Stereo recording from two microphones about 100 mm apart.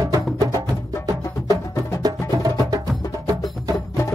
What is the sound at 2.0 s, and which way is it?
Music, 40° right (ahead or behind).